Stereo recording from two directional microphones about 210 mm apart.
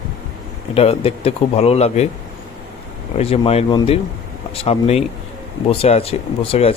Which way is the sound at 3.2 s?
30° left (ahead or behind).